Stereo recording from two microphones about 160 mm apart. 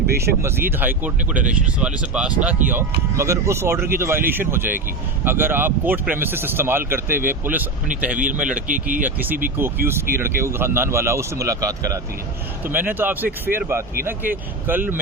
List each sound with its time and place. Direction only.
0.4 s speech: 15° right (ahead or behind)
8.1 s speech: 55° right (ahead or behind)
9.0 s speech: 10° right (ahead or behind)